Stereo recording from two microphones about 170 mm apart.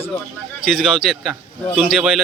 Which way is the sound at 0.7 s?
Centre (ahead or behind).